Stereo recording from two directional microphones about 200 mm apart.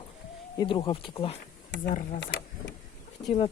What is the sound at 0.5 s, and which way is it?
Speech, 25° left (ahead or behind).